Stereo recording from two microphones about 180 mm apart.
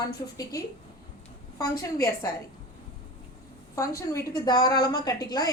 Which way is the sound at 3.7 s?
15° left (ahead or behind).